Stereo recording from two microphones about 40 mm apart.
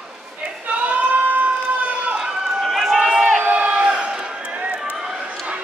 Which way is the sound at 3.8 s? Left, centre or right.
Right.